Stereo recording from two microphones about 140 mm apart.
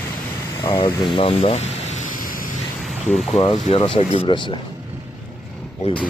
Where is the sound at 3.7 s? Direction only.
45° left (ahead or behind).